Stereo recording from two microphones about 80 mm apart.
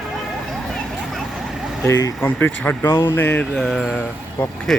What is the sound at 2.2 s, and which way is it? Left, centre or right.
Speech, left.